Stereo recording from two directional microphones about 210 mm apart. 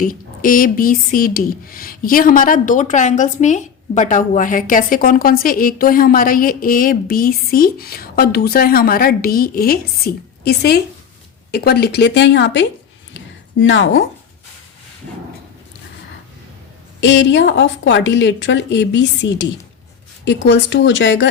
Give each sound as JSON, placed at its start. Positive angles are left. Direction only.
{"t": 0.0, "sound": "speech", "side_deg": 40}
{"t": 13.1, "sound": "a sound", "side_deg": 60}
{"t": 17.0, "sound": "a woman's voice", "side_deg": 60}